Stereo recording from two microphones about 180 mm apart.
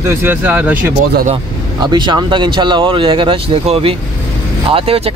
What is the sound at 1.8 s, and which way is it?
Speech, 25° right (ahead or behind).